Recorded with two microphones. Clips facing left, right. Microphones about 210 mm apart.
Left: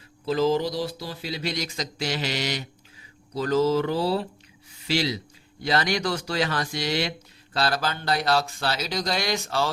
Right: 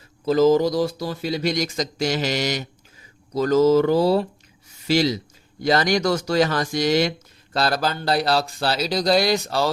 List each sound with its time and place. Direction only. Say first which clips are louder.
0.3 s speech: right 6 dB; 45° right (ahead or behind)